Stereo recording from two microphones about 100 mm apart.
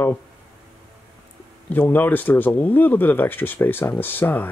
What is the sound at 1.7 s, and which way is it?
Speech, 20° left (ahead or behind).